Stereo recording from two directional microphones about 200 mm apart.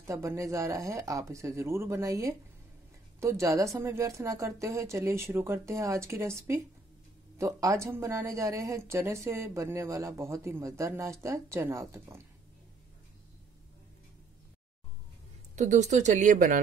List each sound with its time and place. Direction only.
0.0 s speech: 15° right (ahead or behind)
15.5 s speech: 35° right (ahead or behind)